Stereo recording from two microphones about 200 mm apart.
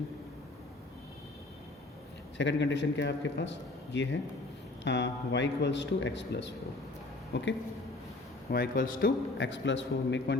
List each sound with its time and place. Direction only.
2.4 s a man's voice: 60° left (ahead or behind); by 9.1 s 45° left (ahead or behind)
9.4 s a man's voice: 65° left (ahead or behind)